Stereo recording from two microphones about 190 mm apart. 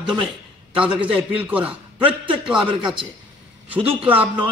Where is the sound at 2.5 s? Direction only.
25° right (ahead or behind).